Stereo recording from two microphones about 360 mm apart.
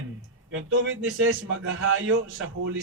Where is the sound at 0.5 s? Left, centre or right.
Right.